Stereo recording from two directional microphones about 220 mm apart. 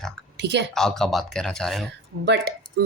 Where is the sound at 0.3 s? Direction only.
55° right (ahead or behind).